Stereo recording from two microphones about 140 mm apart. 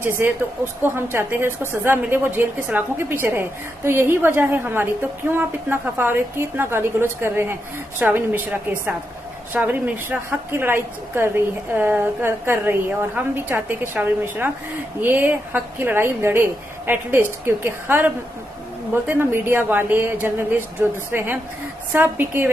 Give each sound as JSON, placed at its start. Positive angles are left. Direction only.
{"t": 0.0, "sound": "a woman's voice", "side_deg": -15}